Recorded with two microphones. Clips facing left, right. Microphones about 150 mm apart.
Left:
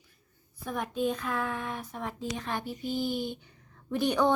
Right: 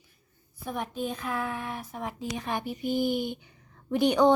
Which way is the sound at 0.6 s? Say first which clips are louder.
Left 2 dB; 10° right (ahead or behind).